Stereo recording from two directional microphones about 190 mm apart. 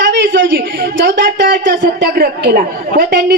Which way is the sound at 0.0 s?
65° right (ahead or behind).